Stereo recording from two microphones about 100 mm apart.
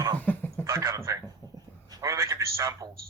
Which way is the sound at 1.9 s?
35° right (ahead or behind).